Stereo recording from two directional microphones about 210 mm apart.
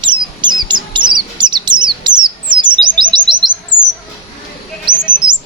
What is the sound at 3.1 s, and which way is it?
Bird, 20° right (ahead or behind).